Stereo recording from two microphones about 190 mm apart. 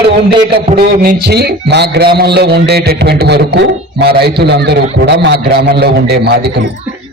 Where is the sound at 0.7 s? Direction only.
50° right (ahead or behind).